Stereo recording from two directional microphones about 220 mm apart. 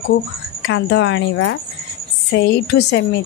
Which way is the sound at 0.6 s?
55° left (ahead or behind).